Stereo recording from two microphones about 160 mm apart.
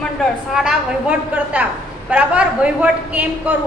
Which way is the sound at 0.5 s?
5° right (ahead or behind).